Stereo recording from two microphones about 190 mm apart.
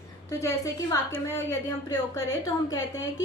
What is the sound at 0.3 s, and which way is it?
A woman's voice, 15° left (ahead or behind).